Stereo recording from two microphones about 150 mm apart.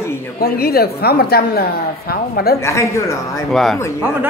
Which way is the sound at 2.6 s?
20° left (ahead or behind).